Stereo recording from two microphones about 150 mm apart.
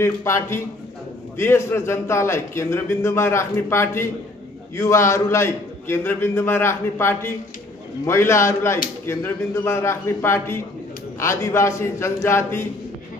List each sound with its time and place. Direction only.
0.0 s a man's voice: 15° left (ahead or behind)